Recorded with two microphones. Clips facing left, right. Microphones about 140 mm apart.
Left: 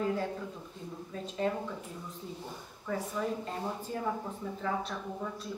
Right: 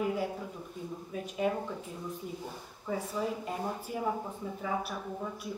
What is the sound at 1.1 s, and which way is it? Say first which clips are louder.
Speech: right 1 dB; 15° right (ahead or behind).